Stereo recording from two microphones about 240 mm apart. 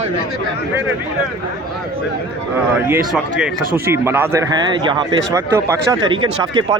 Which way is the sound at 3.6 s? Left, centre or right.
Right.